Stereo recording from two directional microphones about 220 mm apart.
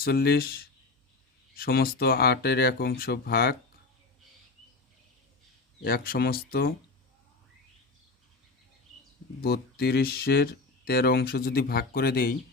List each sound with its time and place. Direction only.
0.0 s speech: 45° left (ahead or behind)
5.8 s speech: 45° left (ahead or behind)
9.4 s speech: 45° left (ahead or behind)